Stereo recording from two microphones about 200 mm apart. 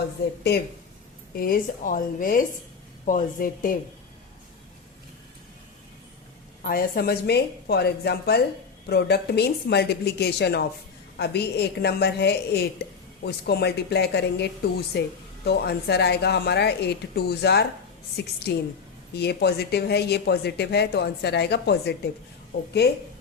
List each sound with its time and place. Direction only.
1.4 s a woman's voice: 45° left (ahead or behind)
6.6 s a woman's voice: 45° left (ahead or behind)